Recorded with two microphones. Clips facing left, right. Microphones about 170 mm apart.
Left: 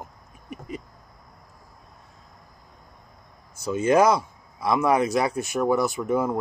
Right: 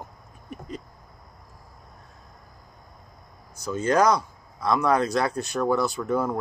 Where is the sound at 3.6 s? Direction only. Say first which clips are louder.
Left 2 dB; 20° left (ahead or behind).